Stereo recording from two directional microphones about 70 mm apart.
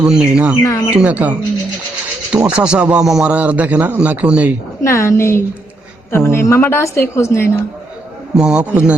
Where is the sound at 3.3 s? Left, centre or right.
Right.